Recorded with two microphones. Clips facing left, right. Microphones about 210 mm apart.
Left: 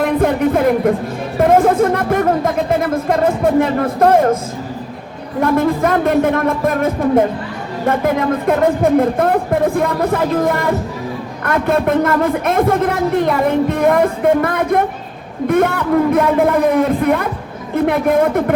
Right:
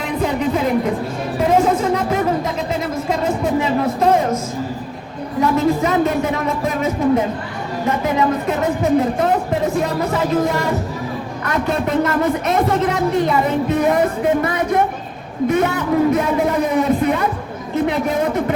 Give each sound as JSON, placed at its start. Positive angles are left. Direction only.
{"t": 0.0, "sound": "speech", "side_deg": 55}
{"t": 5.4, "sound": "a man's voice", "side_deg": 55}